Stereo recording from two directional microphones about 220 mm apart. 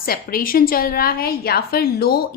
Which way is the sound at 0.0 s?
40° left (ahead or behind).